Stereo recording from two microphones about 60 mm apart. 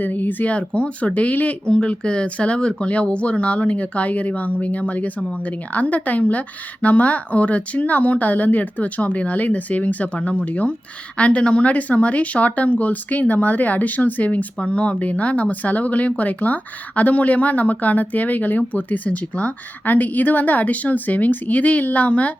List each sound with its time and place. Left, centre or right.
0.0 s speech: left
1.6 s speech: centre